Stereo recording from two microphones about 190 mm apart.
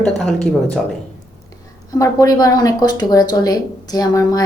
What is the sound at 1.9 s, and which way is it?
Speech, 20° left (ahead or behind).